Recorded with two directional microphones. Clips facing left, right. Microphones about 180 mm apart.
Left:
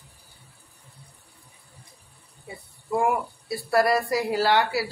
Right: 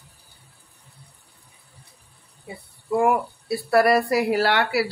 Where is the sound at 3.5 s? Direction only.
65° right (ahead or behind).